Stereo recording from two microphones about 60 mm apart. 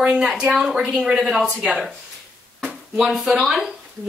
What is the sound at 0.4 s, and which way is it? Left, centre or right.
Speech, centre.